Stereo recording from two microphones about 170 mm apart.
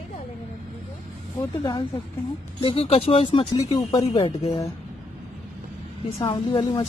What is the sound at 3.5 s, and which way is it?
A woman's voice, 25° left (ahead or behind).